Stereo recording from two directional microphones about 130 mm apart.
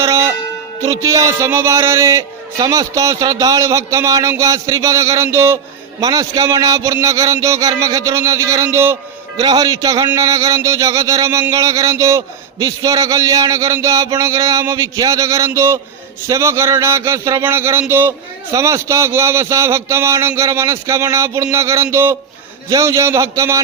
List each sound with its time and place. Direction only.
0.0 s music: 25° right (ahead or behind)
0.8 s speech: 25° right (ahead or behind)